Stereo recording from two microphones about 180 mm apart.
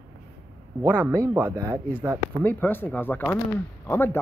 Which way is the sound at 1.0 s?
15° right (ahead or behind).